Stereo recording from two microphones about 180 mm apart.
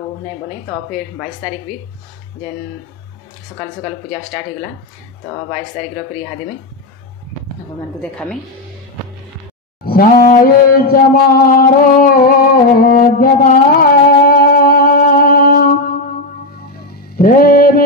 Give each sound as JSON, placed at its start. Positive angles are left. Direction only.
{"t": 3.5, "sound": "speech", "side_deg": 15}
{"t": 8.0, "sound": "speech", "side_deg": 5}
{"t": 9.8, "sound": "a sound", "side_deg": 55}
{"t": 17.2, "sound": "music", "side_deg": 55}